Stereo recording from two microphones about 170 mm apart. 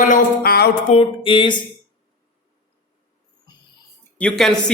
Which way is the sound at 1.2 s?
30° left (ahead or behind).